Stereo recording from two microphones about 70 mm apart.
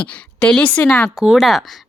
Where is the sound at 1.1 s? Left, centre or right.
Centre.